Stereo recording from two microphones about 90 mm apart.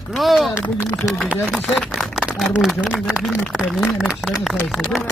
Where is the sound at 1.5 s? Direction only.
5° left (ahead or behind).